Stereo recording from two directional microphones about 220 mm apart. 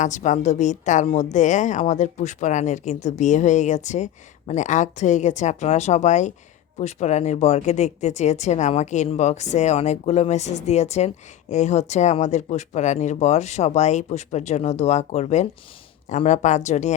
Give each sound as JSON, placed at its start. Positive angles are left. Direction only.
{"t": 0.0, "sound": "a woman's voice", "side_deg": 35}